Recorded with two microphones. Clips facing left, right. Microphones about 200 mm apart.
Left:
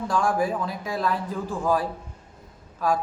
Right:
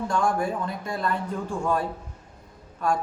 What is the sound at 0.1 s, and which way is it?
A man's voice, centre (ahead or behind).